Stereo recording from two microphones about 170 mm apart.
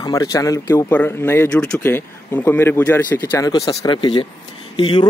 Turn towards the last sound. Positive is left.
turn(degrees=30)  # may be behind; listen again after turning